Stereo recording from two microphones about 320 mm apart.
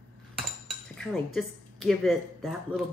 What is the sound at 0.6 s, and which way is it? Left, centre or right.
A woman's voice, centre.